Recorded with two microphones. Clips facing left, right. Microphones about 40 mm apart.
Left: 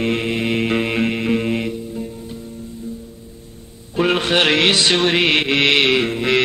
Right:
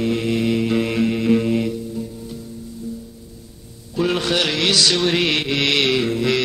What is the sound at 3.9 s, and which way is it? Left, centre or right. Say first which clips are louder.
Music: left 3 dB; left.